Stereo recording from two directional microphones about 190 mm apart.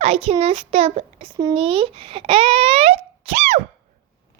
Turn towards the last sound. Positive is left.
turn(degrees=-35)  # may be behind; listen again after turning